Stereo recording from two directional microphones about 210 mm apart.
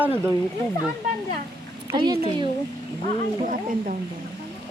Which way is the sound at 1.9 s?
20° right (ahead or behind).